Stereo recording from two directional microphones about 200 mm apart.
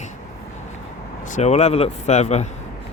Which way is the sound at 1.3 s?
35° left (ahead or behind).